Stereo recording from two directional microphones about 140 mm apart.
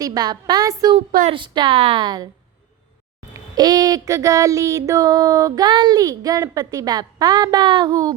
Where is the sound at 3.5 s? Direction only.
30° right (ahead or behind).